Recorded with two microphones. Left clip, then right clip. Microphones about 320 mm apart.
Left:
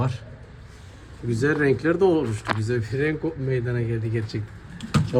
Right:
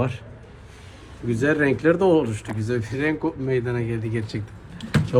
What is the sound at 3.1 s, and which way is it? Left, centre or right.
Speech, centre.